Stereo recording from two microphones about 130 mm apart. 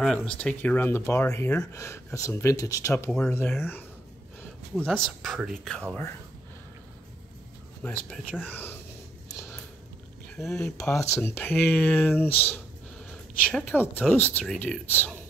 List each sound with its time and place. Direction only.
0.0 s speech: 5° left (ahead or behind)
4.7 s speech: 5° left (ahead or behind)
7.8 s speech: 10° left (ahead or behind)
10.3 s speech: centre (ahead or behind)
11.0 s speech: 15° left (ahead or behind)